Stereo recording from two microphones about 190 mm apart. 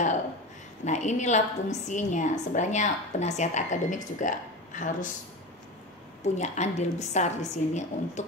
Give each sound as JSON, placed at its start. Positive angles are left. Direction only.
{"t": 0.8, "sound": "a woman's voice", "side_deg": 40}
{"t": 6.2, "sound": "a woman's voice", "side_deg": 40}